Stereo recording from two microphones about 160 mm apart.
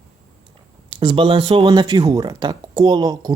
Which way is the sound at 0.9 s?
30° right (ahead or behind).